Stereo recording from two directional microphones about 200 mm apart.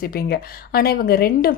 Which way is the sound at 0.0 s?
50° left (ahead or behind).